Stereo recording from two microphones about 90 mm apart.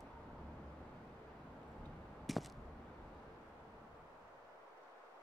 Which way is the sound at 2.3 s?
Centre (ahead or behind).